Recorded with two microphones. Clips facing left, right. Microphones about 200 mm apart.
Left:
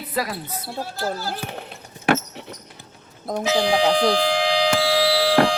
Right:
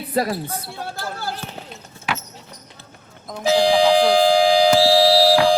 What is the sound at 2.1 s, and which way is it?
Basketball bounce, 55° left (ahead or behind).